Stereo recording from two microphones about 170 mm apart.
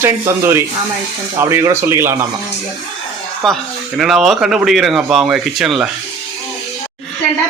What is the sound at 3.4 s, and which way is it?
Speech, centre (ahead or behind).